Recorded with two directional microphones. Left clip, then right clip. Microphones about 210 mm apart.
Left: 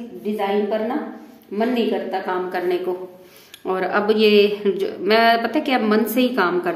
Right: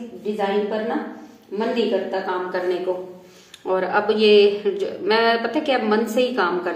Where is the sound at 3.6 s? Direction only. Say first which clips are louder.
Even; 40° left (ahead or behind).